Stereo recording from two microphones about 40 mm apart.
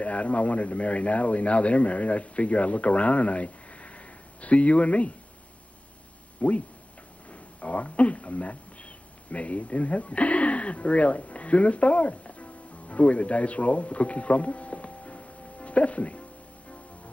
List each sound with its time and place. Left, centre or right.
0.0 s speech: left
6.4 s speech: left